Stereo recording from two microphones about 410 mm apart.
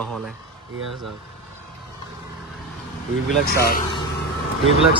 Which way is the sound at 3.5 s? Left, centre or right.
Left.